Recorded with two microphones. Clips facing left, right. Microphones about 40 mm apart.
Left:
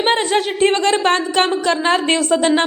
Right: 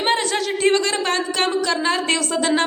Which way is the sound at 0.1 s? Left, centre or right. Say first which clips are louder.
Left 2 dB; left.